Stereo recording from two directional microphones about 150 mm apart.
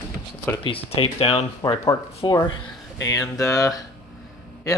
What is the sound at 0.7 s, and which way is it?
Speech, 35° left (ahead or behind).